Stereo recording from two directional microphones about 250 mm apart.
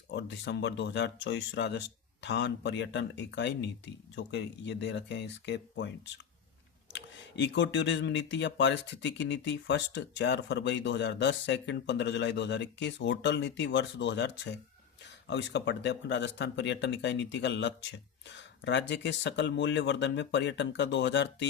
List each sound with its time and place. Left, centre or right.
0.1 s speech: left